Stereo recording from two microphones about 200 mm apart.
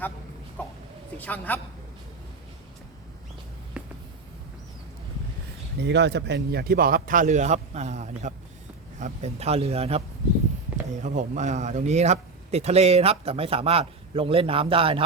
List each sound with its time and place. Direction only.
1.2 s a woman's voice: 10° left (ahead or behind)
3.8 s a sound: 5° right (ahead or behind)
5.8 s a man's voice: 60° right (ahead or behind); by 10.0 s 30° right (ahead or behind)
11.0 s a man's voice: 40° right (ahead or behind)